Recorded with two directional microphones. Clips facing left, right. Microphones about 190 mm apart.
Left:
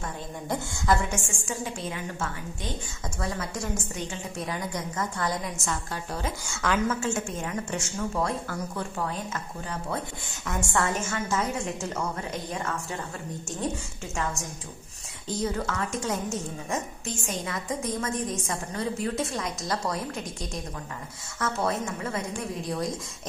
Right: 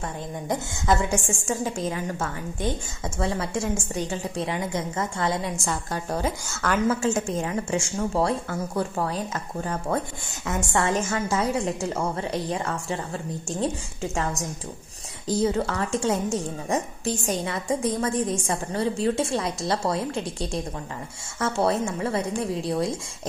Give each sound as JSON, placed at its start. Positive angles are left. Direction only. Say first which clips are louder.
{"t": 1.1, "sound": "a woman's voice", "louder": "right 6 dB", "side_deg": -40}
{"t": 3.2, "sound": "a woman's voice", "louder": "right 6 dB", "side_deg": -30}
{"t": 4.5, "sound": "a woman's voice", "louder": "right 4 dB", "side_deg": -25}
{"t": 6.5, "sound": "a woman's voice", "louder": "left 1 dB", "side_deg": 0}
{"t": 6.9, "sound": "a woman's voice", "louder": "right 5 dB", "side_deg": -35}
{"t": 10.4, "sound": "a woman's voice", "louder": "right 3 dB", "side_deg": -25}
{"t": 11.0, "sound": "a woman's voice", "louder": "right 4 dB", "side_deg": -35}
{"t": 14.1, "sound": "a woman's voice", "louder": "right 2 dB", "side_deg": -35}